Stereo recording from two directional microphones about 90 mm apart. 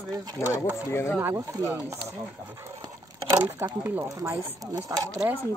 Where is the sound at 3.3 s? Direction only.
50° right (ahead or behind).